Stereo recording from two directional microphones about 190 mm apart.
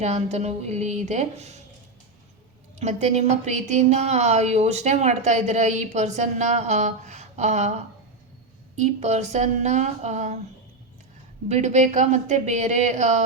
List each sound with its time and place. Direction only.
0.0 s speech: 35° right (ahead or behind)
2.7 s speech: 35° right (ahead or behind)
11.4 s speech: 35° right (ahead or behind)